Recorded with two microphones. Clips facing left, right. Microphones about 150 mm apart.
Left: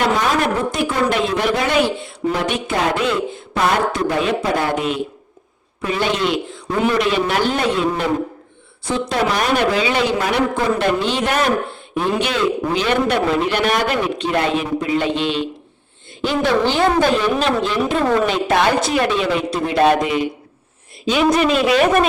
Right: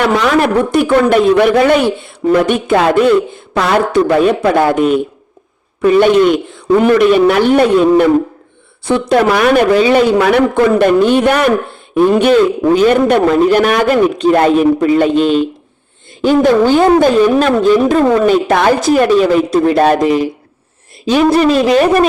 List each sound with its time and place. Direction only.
0.0 s speech: 65° right (ahead or behind)
3.5 s a man's voice: 70° right (ahead or behind); by 22.0 s 40° right (ahead or behind)